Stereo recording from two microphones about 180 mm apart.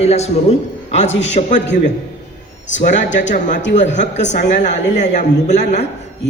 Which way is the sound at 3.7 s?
40° left (ahead or behind).